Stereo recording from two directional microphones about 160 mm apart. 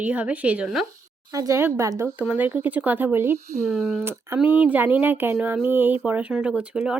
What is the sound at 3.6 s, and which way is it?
Speech, centre (ahead or behind).